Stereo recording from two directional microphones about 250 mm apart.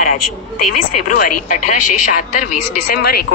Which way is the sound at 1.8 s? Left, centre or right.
Left.